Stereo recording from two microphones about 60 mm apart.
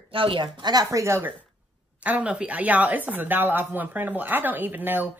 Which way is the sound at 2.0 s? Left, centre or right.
Right.